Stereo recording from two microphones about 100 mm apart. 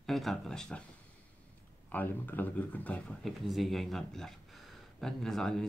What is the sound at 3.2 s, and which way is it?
Speech, centre (ahead or behind).